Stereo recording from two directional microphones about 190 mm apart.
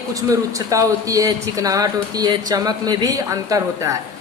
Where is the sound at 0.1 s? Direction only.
20° right (ahead or behind).